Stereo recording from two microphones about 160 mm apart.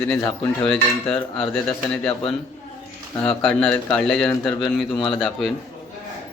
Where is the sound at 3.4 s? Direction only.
5° left (ahead or behind).